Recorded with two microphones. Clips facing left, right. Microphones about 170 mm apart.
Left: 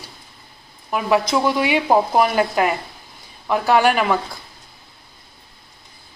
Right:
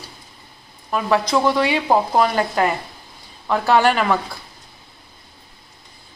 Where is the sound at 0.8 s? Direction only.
10° left (ahead or behind).